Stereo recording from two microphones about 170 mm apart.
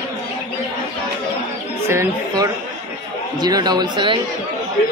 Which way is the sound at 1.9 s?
15° right (ahead or behind).